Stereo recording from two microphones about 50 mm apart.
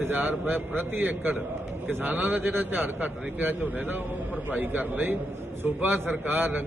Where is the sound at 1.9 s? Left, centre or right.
Right.